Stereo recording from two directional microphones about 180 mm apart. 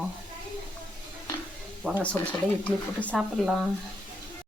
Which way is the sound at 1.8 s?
5° right (ahead or behind).